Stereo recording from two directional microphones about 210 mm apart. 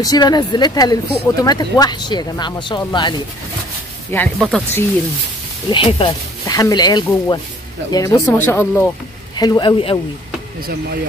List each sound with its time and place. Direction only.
0.0 s speech: 20° left (ahead or behind)
4.1 s speech: 5° left (ahead or behind)
5.7 s speech: 25° left (ahead or behind)